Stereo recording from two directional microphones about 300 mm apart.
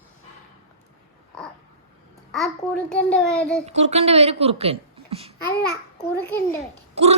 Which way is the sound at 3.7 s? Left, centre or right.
Right.